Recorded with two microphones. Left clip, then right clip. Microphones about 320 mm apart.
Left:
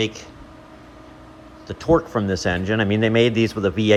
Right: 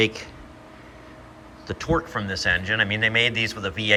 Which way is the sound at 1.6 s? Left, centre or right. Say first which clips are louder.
Left 6 dB; centre.